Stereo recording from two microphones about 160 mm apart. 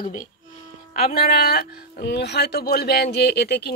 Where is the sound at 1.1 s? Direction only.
70° left (ahead or behind).